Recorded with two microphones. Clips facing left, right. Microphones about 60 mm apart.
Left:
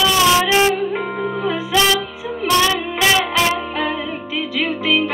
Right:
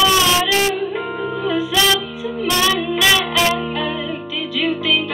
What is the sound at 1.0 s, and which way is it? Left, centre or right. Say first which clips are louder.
Music: left 1 dB; left.